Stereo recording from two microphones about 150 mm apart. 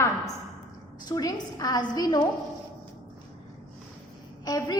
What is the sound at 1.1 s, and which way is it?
A woman's voice, 25° left (ahead or behind).